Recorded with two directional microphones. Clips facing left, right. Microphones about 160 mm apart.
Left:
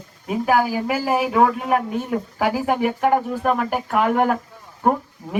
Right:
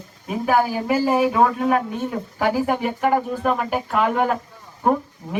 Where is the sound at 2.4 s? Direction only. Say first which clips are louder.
Even; 15° left (ahead or behind).